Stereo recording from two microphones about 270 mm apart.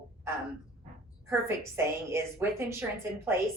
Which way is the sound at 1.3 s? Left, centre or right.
Centre.